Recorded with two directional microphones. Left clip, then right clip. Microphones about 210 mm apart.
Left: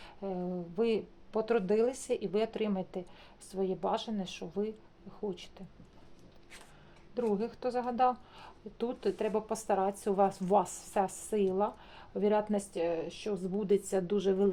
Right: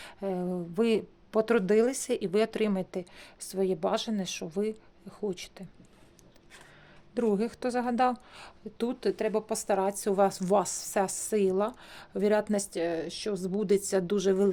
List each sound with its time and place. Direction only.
0.0 s speech: 50° right (ahead or behind)
7.1 s a woman's voice: 55° right (ahead or behind)